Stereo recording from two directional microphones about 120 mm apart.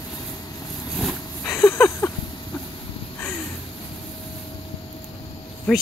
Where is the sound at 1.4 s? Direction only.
20° left (ahead or behind).